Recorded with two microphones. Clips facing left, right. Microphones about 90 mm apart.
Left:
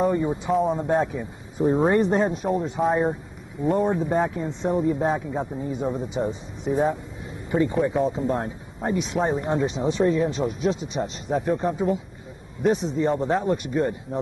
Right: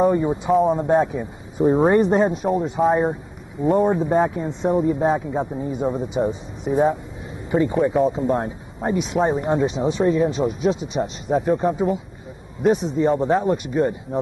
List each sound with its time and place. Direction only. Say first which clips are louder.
0.0 s speech: right 4 dB; 15° right (ahead or behind)
0.5 s speech: right 5 dB; centre (ahead or behind)
1.0 s speech: right 3 dB; 25° right (ahead or behind)
2.0 s speech: right 4 dB; 20° right (ahead or behind)
2.4 s speech: right 4 dB; 5° right (ahead or behind)
3.9 s speech: right 4 dB; 25° right (ahead or behind)
4.6 s speech: right 3 dB; 5° right (ahead or behind)